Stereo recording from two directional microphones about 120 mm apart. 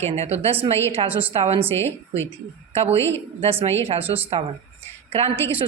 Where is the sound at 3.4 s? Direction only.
55° right (ahead or behind).